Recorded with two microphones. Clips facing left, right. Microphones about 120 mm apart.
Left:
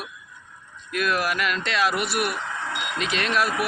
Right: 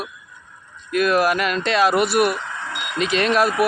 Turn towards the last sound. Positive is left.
turn(degrees=-40)  # may be behind; listen again after turning